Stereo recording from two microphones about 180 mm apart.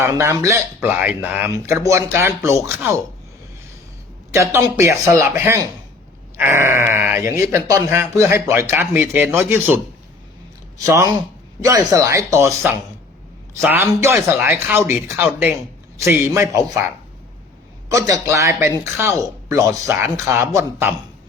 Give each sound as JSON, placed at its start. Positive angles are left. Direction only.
{"t": 0.0, "sound": "speech", "side_deg": -15}
{"t": 4.4, "sound": "speech", "side_deg": -15}
{"t": 10.8, "sound": "speech", "side_deg": -15}
{"t": 17.8, "sound": "speech", "side_deg": -20}